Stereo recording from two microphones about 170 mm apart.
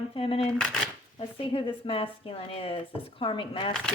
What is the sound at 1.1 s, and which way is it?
Speech, 35° left (ahead or behind).